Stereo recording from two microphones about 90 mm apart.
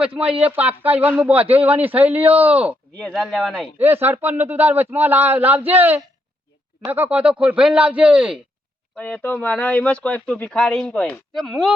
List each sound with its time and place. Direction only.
0.0 s speech: 10° right (ahead or behind)
3.1 s speech: centre (ahead or behind)
3.8 s speech: 25° right (ahead or behind)
9.0 s speech: 15° left (ahead or behind)